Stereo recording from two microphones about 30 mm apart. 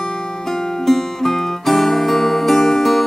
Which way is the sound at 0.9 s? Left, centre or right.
Centre.